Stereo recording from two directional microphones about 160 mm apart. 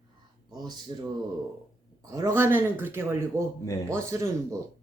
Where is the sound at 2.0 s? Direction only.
20° right (ahead or behind).